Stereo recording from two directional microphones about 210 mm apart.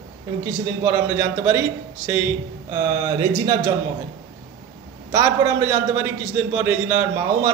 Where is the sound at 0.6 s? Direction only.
15° right (ahead or behind).